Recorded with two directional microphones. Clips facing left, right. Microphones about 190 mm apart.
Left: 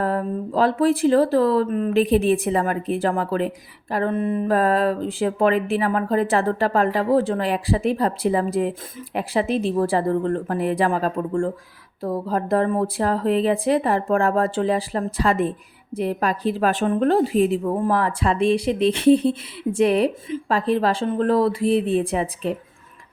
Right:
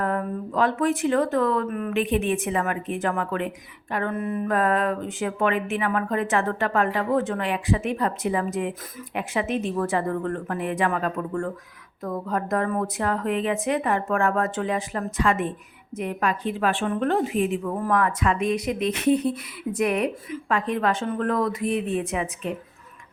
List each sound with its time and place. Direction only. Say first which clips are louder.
0.0 s speech: left 3 dB; 30° left (ahead or behind)